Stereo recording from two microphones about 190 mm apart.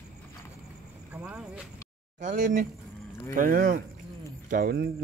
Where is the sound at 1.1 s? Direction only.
10° right (ahead or behind).